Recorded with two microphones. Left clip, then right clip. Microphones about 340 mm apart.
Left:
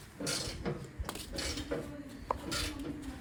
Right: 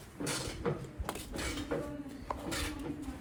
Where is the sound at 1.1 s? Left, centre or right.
Centre.